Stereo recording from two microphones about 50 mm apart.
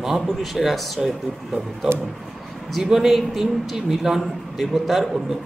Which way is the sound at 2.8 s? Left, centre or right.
Centre.